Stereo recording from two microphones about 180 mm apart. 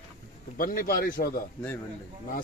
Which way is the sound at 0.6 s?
55° left (ahead or behind).